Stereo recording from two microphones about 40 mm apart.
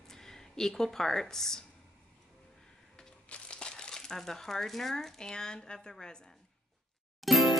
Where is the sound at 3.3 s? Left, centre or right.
Left.